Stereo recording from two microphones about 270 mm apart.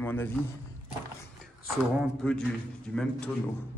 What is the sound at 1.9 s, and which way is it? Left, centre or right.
Speech, centre.